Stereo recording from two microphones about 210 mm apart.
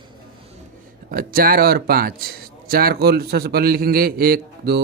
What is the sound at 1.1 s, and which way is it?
A man's voice, 45° right (ahead or behind).